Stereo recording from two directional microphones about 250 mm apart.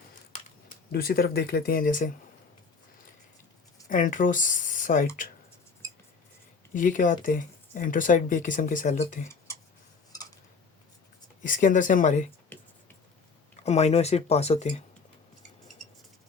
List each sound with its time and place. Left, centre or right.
0.9 s speech: left
3.8 s speech: left
6.7 s speech: left
11.4 s speech: left
13.7 s speech: left